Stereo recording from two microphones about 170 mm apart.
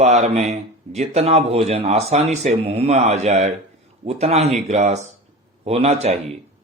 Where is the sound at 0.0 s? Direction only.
40° right (ahead or behind).